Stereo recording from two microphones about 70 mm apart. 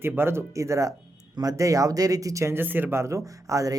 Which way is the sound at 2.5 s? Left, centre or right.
Right.